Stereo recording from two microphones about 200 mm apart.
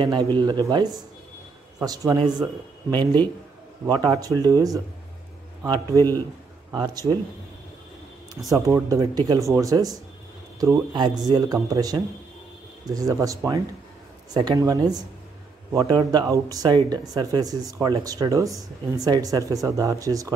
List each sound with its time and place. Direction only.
0.0 s speech: 20° right (ahead or behind)
8.5 s speech: 15° right (ahead or behind)